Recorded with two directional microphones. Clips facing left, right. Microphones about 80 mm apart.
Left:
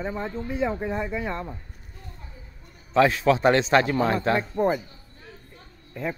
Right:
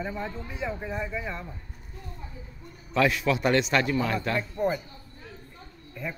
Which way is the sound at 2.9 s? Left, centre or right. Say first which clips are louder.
Left 5 dB; left.